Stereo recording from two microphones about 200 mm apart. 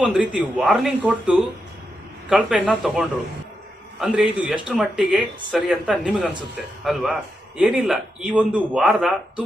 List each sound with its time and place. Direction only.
0.0 s a man's voice: 5° right (ahead or behind)